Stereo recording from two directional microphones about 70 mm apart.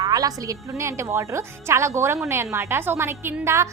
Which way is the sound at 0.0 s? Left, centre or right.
Right.